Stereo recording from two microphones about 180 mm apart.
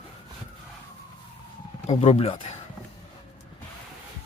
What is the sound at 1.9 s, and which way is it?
Speech, 35° left (ahead or behind).